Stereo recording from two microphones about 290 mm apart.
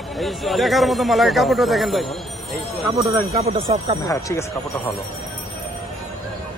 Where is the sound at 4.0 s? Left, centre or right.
Centre.